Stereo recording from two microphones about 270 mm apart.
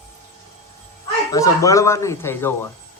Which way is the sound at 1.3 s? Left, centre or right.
Centre.